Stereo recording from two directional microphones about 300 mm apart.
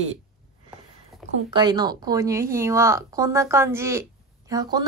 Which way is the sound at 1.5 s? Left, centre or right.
Centre.